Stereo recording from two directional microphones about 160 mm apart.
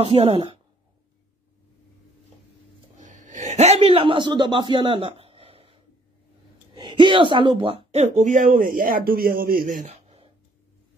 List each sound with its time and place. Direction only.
0.0 s a woman's voice: 35° right (ahead or behind)
3.0 s a sound: 50° right (ahead or behind)
6.7 s speech: 30° right (ahead or behind)